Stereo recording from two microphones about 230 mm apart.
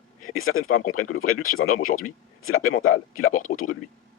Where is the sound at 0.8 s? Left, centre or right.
Left.